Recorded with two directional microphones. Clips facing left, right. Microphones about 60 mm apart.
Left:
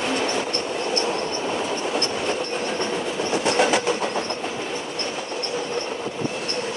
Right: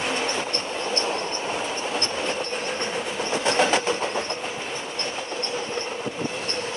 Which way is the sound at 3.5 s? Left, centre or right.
Right.